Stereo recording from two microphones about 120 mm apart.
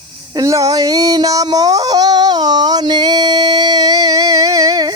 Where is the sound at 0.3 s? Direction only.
30° right (ahead or behind).